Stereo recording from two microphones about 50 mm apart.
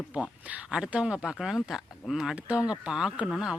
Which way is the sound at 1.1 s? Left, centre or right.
Centre.